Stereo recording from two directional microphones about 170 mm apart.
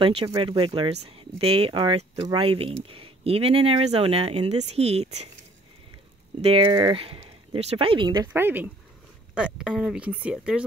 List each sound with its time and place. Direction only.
0.0 s speech: 30° right (ahead or behind)
6.4 s speech: 30° right (ahead or behind)
8.3 s speech: 10° right (ahead or behind)